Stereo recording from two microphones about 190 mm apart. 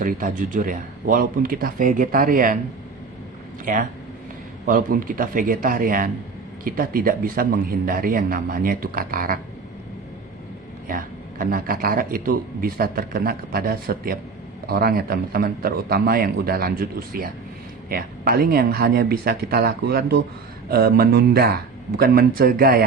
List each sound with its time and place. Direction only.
0.0 s a man's voice: 45° right (ahead or behind)
3.7 s a man's voice: 45° right (ahead or behind)
10.8 s a man's voice: 45° right (ahead or behind)